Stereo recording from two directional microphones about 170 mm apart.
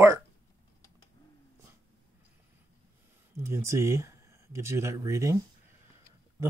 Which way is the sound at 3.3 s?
15° right (ahead or behind).